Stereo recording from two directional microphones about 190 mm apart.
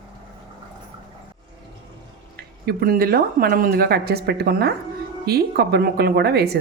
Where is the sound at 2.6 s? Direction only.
50° right (ahead or behind).